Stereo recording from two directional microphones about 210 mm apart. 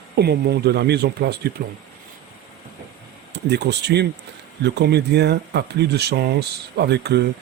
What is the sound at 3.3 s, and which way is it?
Speech, 55° right (ahead or behind).